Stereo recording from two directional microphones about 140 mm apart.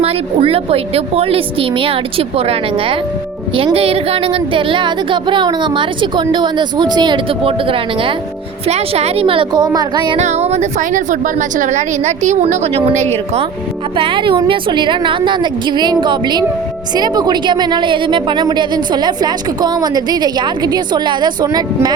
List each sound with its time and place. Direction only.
0.0 s a woman's voice: 45° right (ahead or behind)
10.2 s a woman's voice: 50° right (ahead or behind)
13.9 s a woman's voice: 35° right (ahead or behind)